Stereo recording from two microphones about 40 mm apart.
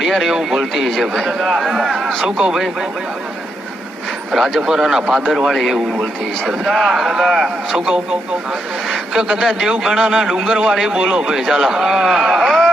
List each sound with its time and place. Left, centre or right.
0.0 s a man's voice: centre
2.2 s speech: centre
4.3 s a man's voice: centre
5.5 s a man's voice: centre
7.7 s a man's voice: centre
9.4 s a man's voice: centre
10.0 s a man's voice: centre
10.9 s speech: right
11.3 s a man's voice: centre
12.4 s a sound: centre